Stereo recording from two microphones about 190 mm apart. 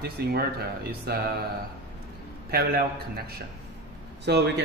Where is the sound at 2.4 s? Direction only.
55° right (ahead or behind).